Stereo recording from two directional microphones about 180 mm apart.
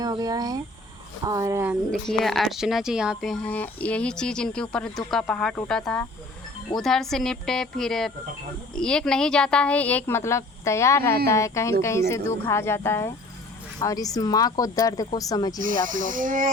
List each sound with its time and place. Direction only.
0.0 s speech: 20° right (ahead or behind)
1.9 s speech: centre (ahead or behind); by 15.5 s 20° left (ahead or behind)
15.6 s speech: 50° right (ahead or behind)